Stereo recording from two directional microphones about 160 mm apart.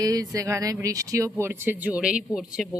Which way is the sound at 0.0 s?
20° right (ahead or behind).